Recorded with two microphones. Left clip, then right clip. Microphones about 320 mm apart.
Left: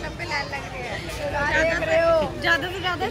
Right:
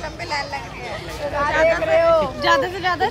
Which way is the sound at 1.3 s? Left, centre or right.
Right.